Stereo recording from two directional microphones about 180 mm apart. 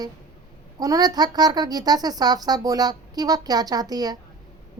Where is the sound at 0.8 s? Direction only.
20° right (ahead or behind).